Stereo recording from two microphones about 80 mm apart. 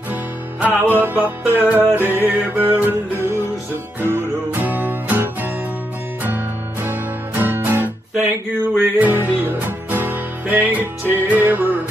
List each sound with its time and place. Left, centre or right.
0.1 s music: right